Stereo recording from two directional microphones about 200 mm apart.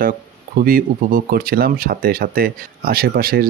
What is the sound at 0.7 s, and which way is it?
Speech, 45° right (ahead or behind).